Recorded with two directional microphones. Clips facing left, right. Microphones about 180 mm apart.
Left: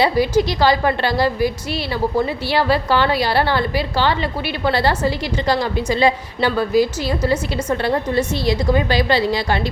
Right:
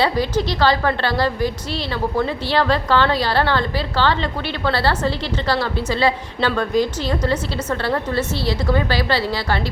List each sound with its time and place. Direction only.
0.0 s a woman's voice: 10° left (ahead or behind)